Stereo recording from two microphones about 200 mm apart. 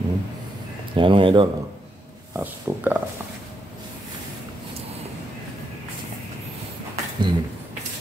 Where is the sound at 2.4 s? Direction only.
10° right (ahead or behind).